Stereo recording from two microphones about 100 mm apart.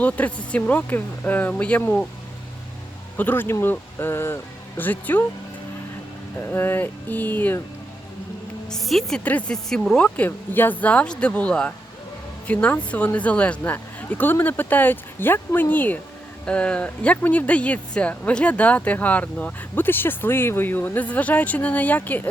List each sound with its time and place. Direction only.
0.0 s speech: 15° left (ahead or behind)
3.2 s speech: 20° left (ahead or behind)
6.3 s speech: 25° left (ahead or behind)
8.7 s a woman's voice: centre (ahead or behind)
9.2 s speech: 15° left (ahead or behind)